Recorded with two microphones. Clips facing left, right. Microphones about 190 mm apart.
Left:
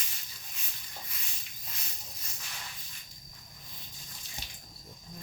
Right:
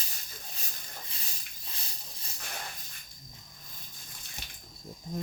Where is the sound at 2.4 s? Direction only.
55° right (ahead or behind).